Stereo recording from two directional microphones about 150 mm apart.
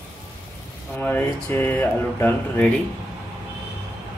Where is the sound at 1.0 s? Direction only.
15° left (ahead or behind).